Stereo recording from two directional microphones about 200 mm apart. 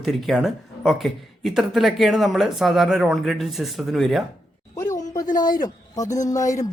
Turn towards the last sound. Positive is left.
turn(degrees=15)  # may be behind; listen again after turning